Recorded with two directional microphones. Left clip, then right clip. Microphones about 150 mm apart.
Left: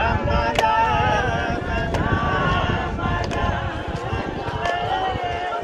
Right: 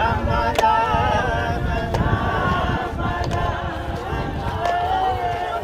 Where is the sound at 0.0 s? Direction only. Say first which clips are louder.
Right 1 dB; 75° right (ahead or behind).